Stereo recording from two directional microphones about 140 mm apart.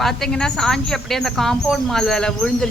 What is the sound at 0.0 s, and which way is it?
Speech, 5° left (ahead or behind).